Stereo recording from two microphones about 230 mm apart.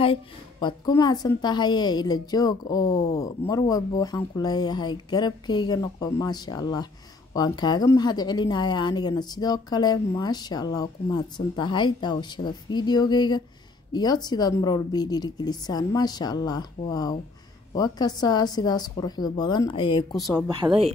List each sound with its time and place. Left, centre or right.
0.0 s a woman's voice: left
20.2 s speech: centre
20.6 s speech: right